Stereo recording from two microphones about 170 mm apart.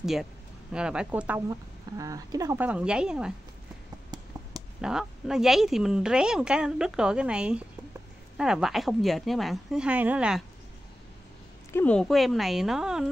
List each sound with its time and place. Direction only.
0.0 s a woman's voice: centre (ahead or behind)
2.0 s speech: 20° right (ahead or behind); by 3.3 s 5° right (ahead or behind)
4.1 s a sound: 25° right (ahead or behind)
4.8 s a woman's voice: 5° right (ahead or behind)
11.7 s a woman's voice: 10° left (ahead or behind)